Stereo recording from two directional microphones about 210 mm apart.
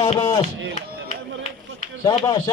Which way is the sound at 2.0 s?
20° left (ahead or behind).